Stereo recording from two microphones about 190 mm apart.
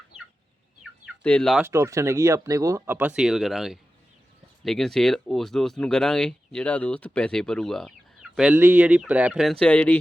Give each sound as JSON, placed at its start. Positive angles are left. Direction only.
{"t": 0.8, "sound": "bird", "side_deg": -5}
{"t": 1.3, "sound": "speech", "side_deg": 5}
{"t": 1.6, "sound": "speech", "side_deg": -15}